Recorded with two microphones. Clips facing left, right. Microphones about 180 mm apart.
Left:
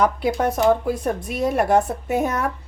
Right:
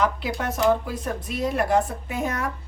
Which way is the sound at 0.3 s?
50° left (ahead or behind).